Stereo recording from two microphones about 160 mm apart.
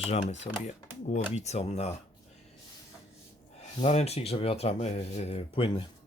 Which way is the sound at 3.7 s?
40° left (ahead or behind).